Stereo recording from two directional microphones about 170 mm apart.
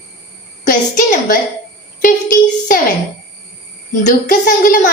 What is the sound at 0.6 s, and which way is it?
Speech, 50° left (ahead or behind).